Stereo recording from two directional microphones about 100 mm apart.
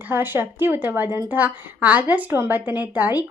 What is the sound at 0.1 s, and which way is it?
A woman's voice, 20° right (ahead or behind).